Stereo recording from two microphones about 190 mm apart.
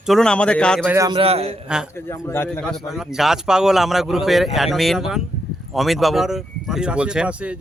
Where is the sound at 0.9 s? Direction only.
15° right (ahead or behind).